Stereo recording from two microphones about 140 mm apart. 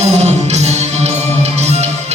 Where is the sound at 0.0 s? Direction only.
50° right (ahead or behind).